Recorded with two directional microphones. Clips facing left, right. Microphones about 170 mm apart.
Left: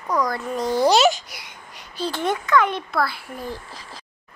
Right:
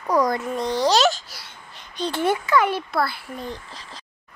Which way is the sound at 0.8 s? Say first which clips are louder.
Left 2 dB; 10° left (ahead or behind).